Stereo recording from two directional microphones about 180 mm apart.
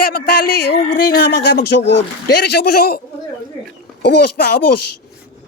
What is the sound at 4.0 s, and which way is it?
Speech, 70° left (ahead or behind).